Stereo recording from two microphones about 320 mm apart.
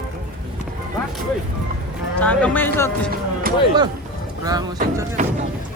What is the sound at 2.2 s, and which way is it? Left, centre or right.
Speech, centre.